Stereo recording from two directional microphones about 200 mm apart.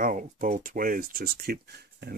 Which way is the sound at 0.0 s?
40° right (ahead or behind).